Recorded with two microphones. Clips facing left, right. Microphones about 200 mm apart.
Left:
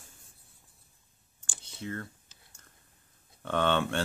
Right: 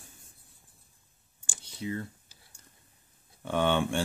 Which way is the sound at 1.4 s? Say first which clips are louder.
Right 3 dB; 15° right (ahead or behind).